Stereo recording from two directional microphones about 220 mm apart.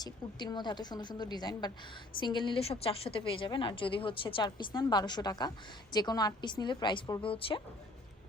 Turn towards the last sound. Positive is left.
turn(degrees=25)  # may be behind; listen again after turning